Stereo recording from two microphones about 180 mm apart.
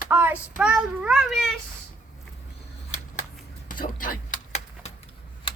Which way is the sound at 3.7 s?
50° left (ahead or behind).